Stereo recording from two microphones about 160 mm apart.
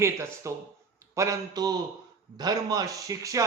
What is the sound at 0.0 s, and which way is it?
A man's voice, 20° right (ahead or behind).